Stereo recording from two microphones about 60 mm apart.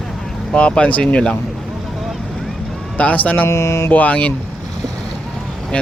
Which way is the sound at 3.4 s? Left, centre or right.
Left.